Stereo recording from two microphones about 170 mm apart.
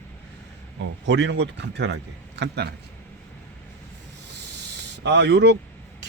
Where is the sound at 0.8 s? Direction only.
90° right.